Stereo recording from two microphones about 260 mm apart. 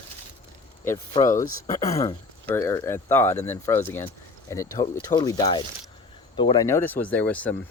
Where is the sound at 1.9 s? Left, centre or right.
Left.